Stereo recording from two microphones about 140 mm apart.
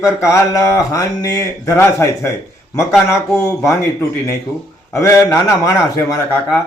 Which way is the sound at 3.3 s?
20° left (ahead or behind).